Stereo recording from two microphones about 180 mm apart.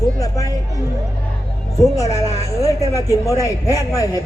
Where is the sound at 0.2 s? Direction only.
20° left (ahead or behind).